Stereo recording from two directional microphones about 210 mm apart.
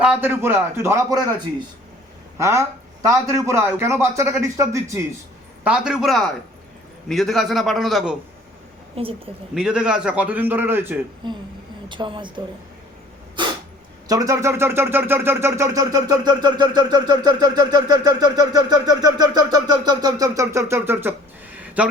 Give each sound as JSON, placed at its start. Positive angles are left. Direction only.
{"t": 0.0, "sound": "a man's voice", "side_deg": -10}
{"t": 9.0, "sound": "speech", "side_deg": -25}
{"t": 9.6, "sound": "speech", "side_deg": -5}
{"t": 11.2, "sound": "speech", "side_deg": -20}
{"t": 14.1, "sound": "speech", "side_deg": -15}